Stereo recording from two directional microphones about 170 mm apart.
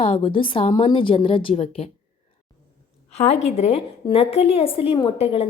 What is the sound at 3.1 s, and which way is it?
A woman's voice, 40° left (ahead or behind).